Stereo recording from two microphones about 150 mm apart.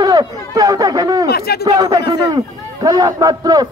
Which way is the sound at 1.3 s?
90° left.